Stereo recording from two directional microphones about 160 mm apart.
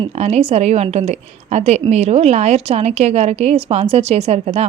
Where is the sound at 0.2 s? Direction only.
40° right (ahead or behind).